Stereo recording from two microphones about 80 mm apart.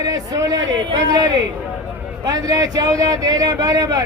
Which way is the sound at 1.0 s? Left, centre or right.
Right.